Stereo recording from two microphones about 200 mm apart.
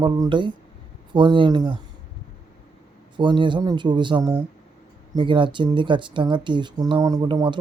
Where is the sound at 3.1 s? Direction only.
25° right (ahead or behind).